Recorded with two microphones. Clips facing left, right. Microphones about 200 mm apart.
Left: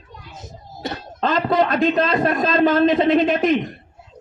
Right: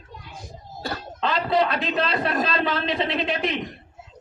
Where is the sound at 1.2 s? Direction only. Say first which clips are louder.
Left 4 dB; 45° left (ahead or behind).